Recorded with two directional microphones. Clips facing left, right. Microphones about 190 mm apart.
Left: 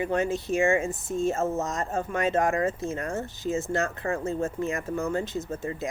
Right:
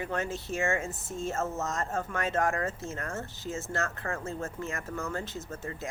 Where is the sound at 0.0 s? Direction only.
15° left (ahead or behind).